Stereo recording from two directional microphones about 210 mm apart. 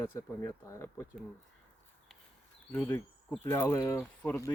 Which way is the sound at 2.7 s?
10° left (ahead or behind).